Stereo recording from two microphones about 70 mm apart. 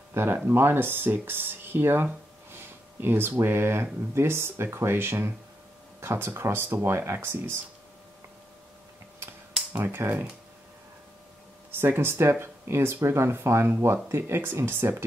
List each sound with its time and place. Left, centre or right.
0.1 s speech: right
2.5 s a sound: right
3.4 s speech: right
9.8 s speech: right
11.7 s speech: right